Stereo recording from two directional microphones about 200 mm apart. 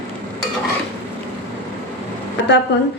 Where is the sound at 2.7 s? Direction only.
60° left (ahead or behind).